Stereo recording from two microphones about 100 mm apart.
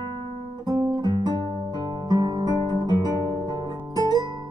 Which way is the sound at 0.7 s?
40° right (ahead or behind).